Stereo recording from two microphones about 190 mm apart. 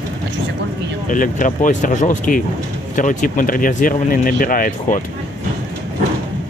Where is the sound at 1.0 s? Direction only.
45° left (ahead or behind).